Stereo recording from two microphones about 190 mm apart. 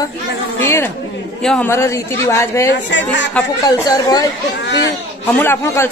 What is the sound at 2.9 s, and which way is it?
Speech, 70° left (ahead or behind).